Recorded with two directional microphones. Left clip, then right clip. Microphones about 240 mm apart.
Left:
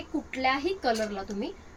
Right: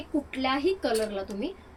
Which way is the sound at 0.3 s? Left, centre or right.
Centre.